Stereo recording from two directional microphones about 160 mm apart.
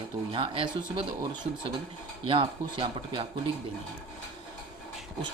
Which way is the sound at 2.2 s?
35° right (ahead or behind).